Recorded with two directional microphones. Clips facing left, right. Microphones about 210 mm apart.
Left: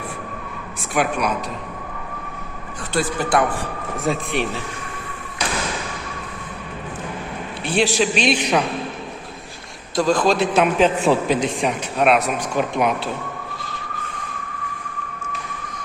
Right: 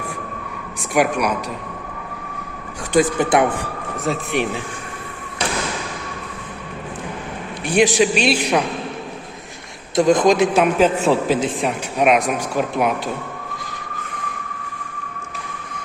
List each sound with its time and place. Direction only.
0.9 s a man's voice: 10° right (ahead or behind)
2.9 s a man's voice: 20° right (ahead or behind)
3.9 s speech: centre (ahead or behind)
7.7 s a man's voice: 15° right (ahead or behind)
9.9 s a man's voice: 20° right (ahead or behind)